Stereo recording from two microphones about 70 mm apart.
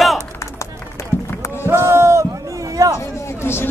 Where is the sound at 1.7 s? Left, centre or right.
Right.